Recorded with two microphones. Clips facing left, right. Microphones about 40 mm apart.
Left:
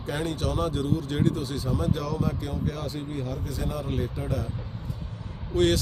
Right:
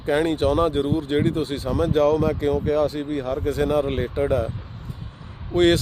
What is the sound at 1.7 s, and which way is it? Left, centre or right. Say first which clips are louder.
Speech: right 11 dB; right.